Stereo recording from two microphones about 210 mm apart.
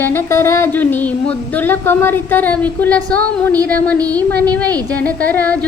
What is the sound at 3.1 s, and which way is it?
Speech, 5° left (ahead or behind).